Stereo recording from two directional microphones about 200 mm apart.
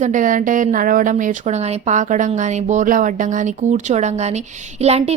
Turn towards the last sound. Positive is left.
turn(degrees=-35)  # may be behind; listen again after turning